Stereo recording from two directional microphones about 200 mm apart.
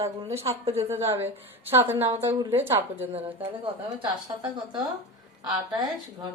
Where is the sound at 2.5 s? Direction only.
10° right (ahead or behind).